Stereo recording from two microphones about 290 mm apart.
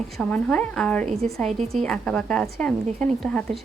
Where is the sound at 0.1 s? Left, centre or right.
Centre.